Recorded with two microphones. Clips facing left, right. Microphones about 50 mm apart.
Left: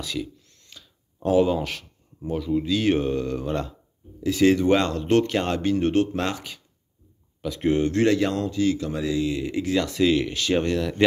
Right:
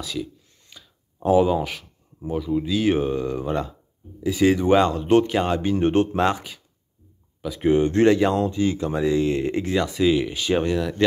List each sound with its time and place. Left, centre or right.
0.0 s speech: centre
0.5 s speech: centre
7.4 s speech: centre
9.2 s speech: right
9.8 s speech: centre